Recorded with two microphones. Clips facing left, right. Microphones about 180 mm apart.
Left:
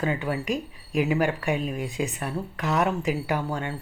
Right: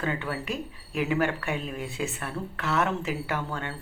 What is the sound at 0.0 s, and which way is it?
Speech, 15° left (ahead or behind).